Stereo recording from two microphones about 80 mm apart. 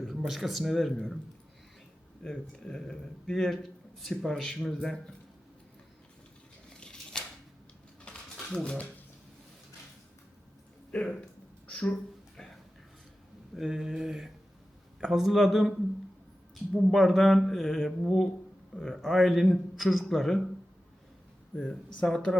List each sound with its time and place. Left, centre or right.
0.2 s a man's voice: centre
2.2 s speech: centre
6.7 s a sound: centre
11.7 s speech: centre
12.4 s a sound: centre
13.6 s a man's voice: centre
16.7 s a man's voice: centre
21.5 s speech: centre